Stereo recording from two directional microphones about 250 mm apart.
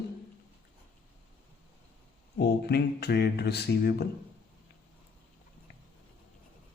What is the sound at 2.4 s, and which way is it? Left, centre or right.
A man's voice, left.